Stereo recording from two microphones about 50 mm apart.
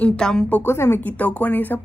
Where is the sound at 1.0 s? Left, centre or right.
Left.